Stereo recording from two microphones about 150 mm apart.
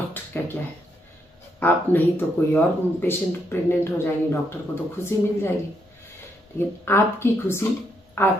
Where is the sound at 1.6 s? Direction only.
15° left (ahead or behind).